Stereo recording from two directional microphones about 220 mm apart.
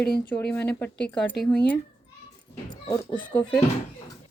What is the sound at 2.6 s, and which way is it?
Speech, 20° left (ahead or behind).